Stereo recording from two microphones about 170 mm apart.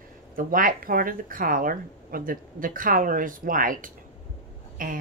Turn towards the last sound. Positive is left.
turn(degrees=-50)  # may be behind; listen again after turning